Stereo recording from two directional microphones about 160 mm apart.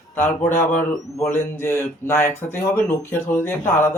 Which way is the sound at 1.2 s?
10° left (ahead or behind).